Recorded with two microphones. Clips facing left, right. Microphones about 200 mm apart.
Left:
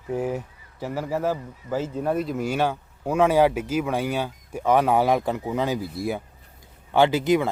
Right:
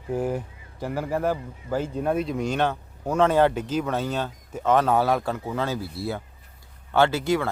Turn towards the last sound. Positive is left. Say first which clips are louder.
# left 3 dB
turn(degrees=20)  # may be behind; listen again after turning